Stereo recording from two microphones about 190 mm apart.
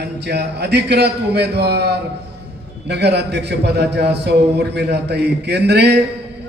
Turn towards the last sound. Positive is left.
turn(degrees=-60)  # may be behind; listen again after turning